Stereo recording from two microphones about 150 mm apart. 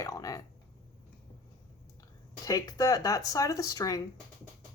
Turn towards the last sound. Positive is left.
turn(degrees=25)  # may be behind; listen again after turning